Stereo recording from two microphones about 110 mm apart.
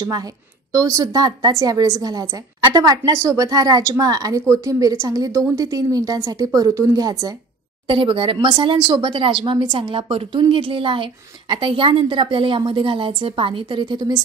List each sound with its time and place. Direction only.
0.0 s a woman's voice: 35° right (ahead or behind)
7.8 s speech: 50° right (ahead or behind)